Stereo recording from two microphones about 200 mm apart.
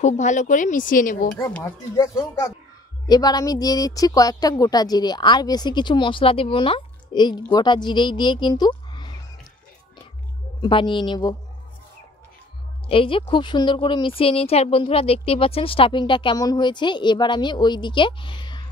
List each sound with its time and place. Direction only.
0.0 s speech: 40° left (ahead or behind)
1.4 s a woman's voice: 15° left (ahead or behind)
10.6 s speech: 25° left (ahead or behind)
12.8 s speech: 25° left (ahead or behind)